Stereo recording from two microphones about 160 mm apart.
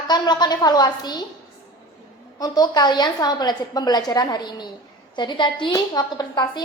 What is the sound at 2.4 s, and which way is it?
A woman's voice, 25° left (ahead or behind).